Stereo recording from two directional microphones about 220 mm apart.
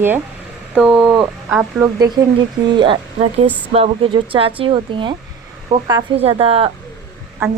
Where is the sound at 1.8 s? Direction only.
15° right (ahead or behind).